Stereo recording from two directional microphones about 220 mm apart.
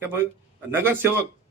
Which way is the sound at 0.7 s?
10° right (ahead or behind).